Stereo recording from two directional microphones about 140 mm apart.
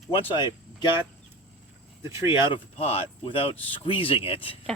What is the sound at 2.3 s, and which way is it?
Speech, 35° left (ahead or behind).